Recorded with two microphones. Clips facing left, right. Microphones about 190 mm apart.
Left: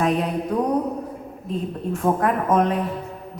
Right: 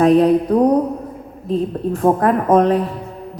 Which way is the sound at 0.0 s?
35° right (ahead or behind).